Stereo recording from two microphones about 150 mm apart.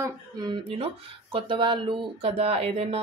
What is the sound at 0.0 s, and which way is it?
A woman's voice, 30° right (ahead or behind).